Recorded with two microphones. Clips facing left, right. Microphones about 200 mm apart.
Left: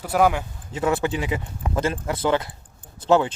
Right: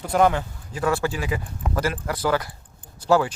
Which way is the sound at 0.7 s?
20° left (ahead or behind).